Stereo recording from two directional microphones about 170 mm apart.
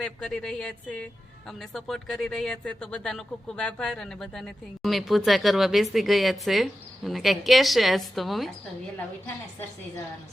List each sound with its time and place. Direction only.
0.0 s speech: 5° left (ahead or behind)